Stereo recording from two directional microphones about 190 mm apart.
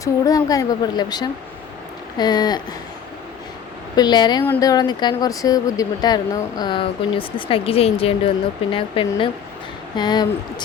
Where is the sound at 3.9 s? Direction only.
20° left (ahead or behind).